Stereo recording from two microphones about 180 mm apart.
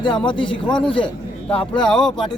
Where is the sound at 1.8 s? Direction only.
5° left (ahead or behind).